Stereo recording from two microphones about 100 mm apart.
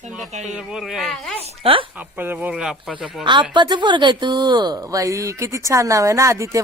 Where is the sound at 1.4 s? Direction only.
70° right (ahead or behind).